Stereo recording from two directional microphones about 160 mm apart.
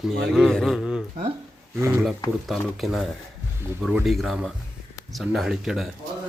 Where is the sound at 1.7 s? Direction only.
15° right (ahead or behind).